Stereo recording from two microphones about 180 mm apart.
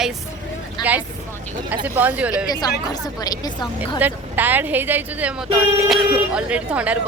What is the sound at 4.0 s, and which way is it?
Speech, 10° right (ahead or behind).